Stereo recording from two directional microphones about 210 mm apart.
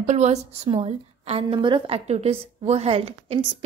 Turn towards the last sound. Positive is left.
turn(degrees=-30)  # may be behind; listen again after turning